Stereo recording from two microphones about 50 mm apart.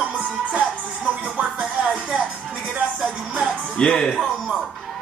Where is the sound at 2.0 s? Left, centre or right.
Centre.